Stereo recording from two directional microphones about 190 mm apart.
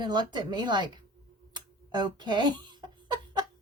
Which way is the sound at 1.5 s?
25° right (ahead or behind).